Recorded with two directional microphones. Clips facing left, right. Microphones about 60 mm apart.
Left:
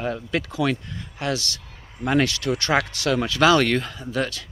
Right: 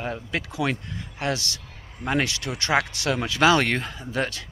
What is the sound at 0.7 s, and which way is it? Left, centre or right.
Speech, right.